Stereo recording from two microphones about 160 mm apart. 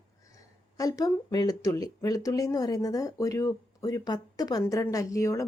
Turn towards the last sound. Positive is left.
turn(degrees=20)  # may be behind; listen again after turning